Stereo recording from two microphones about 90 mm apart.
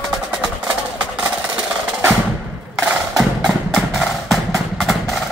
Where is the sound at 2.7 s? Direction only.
5° right (ahead or behind).